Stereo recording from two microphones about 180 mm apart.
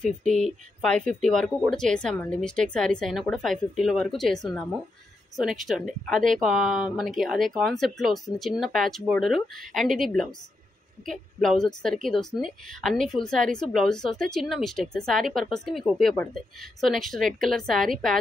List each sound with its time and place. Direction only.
0.0 s a woman's voice: 5° left (ahead or behind)